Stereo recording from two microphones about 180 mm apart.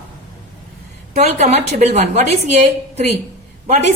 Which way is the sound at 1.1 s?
40° right (ahead or behind).